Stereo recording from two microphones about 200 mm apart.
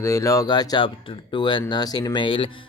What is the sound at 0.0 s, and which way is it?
Speech, 15° left (ahead or behind).